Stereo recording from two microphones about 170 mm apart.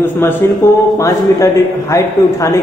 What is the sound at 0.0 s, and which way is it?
A man's voice, 10° left (ahead or behind).